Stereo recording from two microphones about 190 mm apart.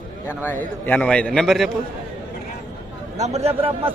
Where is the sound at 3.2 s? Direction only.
35° right (ahead or behind).